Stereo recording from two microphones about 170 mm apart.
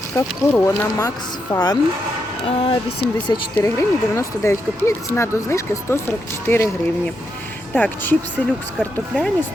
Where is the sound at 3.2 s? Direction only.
25° left (ahead or behind).